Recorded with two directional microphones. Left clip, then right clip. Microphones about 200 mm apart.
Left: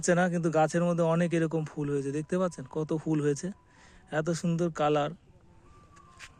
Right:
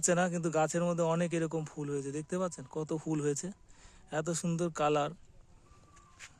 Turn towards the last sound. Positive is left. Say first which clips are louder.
# left 4 dB
turn(degrees=55)  # may be behind; listen again after turning